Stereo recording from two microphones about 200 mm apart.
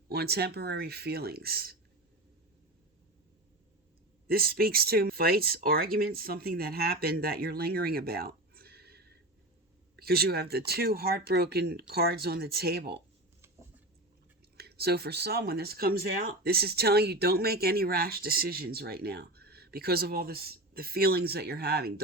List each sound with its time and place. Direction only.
0.1 s speech: 55° right (ahead or behind)
4.3 s speech: 50° right (ahead or behind)
14.5 s speech: 55° right (ahead or behind)